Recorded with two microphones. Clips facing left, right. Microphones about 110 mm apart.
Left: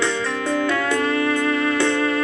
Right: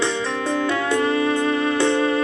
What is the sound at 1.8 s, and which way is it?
Music, 25° right (ahead or behind).